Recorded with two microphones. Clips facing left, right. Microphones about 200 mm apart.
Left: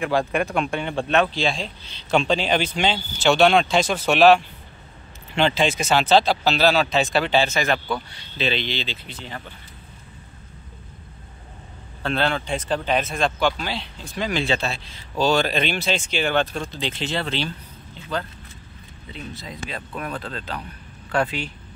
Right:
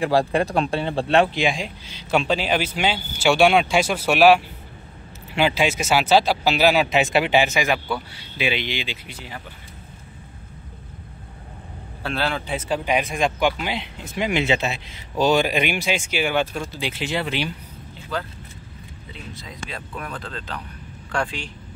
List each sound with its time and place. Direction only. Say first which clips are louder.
0.0 s speech: right 3 dB; 35° right (ahead or behind)
1.3 s speech: right 2 dB; 15° right (ahead or behind)
12.0 s speech: left 2 dB; 5° right (ahead or behind)
21.1 s speech: left 3 dB; 5° left (ahead or behind)